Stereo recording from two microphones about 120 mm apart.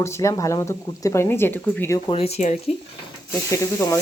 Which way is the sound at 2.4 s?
90° left.